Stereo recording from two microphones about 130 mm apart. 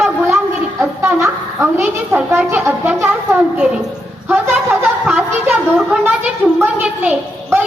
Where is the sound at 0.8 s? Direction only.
15° right (ahead or behind).